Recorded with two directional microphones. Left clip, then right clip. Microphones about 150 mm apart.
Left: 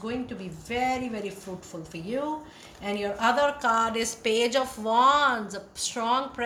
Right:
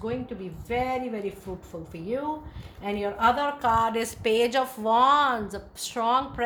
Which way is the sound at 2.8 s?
40° right (ahead or behind).